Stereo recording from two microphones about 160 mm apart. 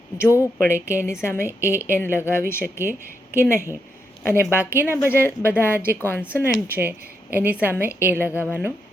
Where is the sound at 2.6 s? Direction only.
15° right (ahead or behind).